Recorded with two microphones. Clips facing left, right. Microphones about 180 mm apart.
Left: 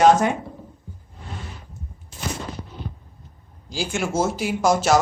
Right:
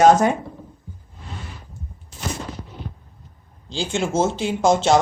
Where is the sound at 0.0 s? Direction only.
45° right (ahead or behind).